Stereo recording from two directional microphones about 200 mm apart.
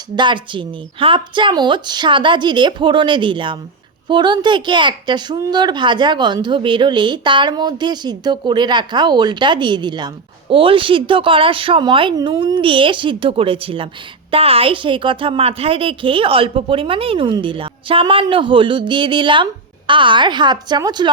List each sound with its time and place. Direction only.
0.2 s speech: 25° right (ahead or behind)